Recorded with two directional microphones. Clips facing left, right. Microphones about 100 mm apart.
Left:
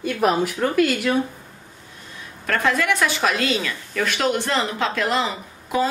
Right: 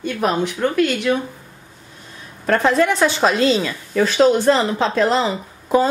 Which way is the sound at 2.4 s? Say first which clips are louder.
Right 5 dB; 30° right (ahead or behind).